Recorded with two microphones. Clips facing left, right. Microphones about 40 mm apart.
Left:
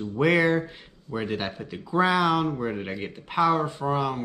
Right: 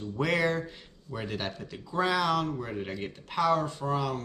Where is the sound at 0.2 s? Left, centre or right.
Centre.